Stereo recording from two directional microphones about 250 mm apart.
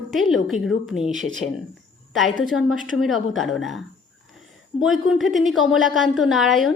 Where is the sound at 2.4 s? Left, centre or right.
Centre.